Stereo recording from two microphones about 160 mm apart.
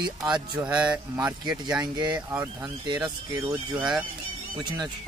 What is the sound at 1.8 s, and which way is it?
Speech, 25° right (ahead or behind).